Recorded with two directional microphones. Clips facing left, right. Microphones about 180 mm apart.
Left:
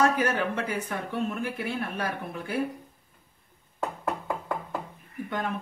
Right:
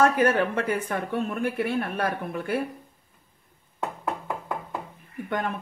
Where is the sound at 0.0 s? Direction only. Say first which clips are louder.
Right 4 dB; 60° right (ahead or behind).